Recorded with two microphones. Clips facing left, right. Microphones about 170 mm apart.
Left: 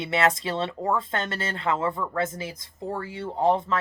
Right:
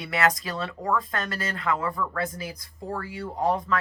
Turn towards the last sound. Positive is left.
turn(degrees=25)  # may be behind; listen again after turning